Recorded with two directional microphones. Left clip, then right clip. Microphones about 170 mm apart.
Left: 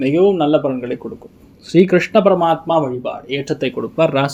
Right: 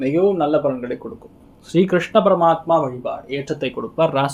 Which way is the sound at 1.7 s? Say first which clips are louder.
Left 4 dB; 25° left (ahead or behind).